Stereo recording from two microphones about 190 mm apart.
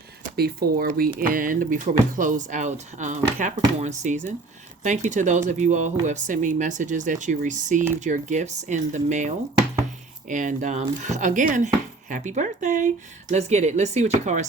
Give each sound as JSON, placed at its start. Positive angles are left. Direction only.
{"t": 0.3, "sound": "speech", "side_deg": -55}